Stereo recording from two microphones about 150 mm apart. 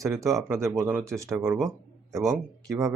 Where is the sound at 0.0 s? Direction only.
20° right (ahead or behind).